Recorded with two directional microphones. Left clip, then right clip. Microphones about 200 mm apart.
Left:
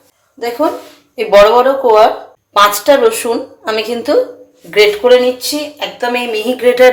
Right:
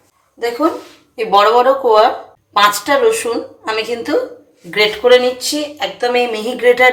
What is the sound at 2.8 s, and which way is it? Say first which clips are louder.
Speech: left 4 dB; 25° left (ahead or behind).